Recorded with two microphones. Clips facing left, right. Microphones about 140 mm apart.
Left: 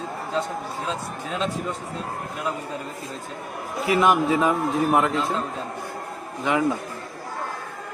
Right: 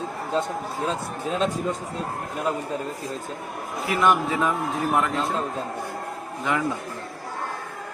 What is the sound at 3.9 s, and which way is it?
Speech, centre (ahead or behind).